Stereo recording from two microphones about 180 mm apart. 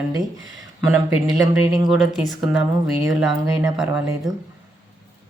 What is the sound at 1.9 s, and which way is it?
Speech, centre (ahead or behind).